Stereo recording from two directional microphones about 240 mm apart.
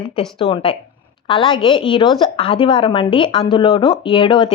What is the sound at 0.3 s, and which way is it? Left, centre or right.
A woman's voice, left.